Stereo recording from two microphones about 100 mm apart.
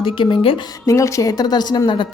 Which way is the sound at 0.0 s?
60° left (ahead or behind).